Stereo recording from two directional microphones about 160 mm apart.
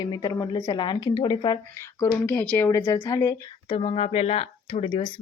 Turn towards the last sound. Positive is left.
turn(degrees=30)  # may be behind; listen again after turning